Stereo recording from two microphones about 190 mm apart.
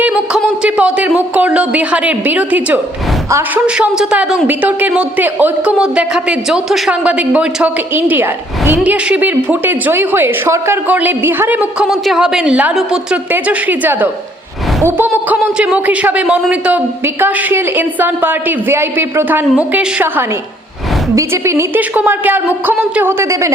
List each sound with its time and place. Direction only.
0.0 s a woman's voice: 5° right (ahead or behind)